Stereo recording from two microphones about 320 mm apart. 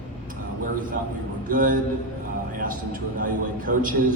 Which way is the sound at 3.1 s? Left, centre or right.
Right.